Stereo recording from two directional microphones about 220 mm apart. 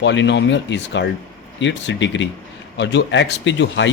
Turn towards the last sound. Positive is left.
turn(degrees=55)  # may be behind; listen again after turning